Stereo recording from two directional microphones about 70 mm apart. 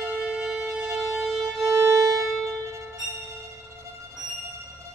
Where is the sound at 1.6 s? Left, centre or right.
Right.